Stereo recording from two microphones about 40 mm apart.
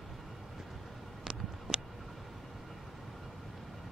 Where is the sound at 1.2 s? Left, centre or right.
Right.